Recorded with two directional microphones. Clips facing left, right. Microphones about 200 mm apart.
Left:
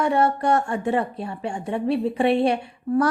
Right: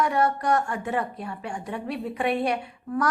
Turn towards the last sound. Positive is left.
turn(degrees=30)  # may be behind; listen again after turning